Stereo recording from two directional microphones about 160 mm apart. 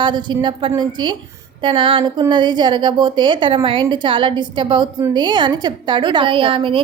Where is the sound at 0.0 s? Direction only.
30° right (ahead or behind).